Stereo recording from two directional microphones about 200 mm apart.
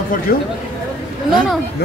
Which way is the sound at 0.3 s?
50° left (ahead or behind).